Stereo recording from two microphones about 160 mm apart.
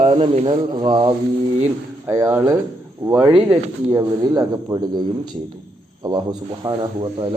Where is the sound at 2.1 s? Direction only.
15° right (ahead or behind).